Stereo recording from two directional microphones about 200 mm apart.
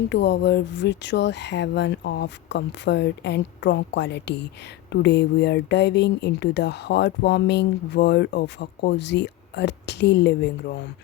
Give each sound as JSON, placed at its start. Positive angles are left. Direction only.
{"t": 0.1, "sound": "speech", "side_deg": 60}